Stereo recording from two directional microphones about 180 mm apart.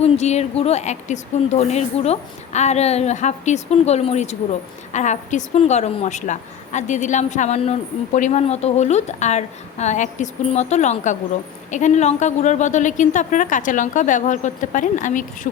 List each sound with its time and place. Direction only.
0.0 s a woman's voice: 40° left (ahead or behind)